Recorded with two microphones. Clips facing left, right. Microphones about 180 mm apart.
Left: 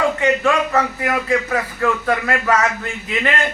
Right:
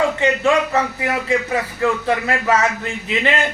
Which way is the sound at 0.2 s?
20° right (ahead or behind).